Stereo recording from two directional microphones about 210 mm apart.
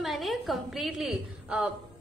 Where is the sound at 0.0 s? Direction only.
Centre (ahead or behind).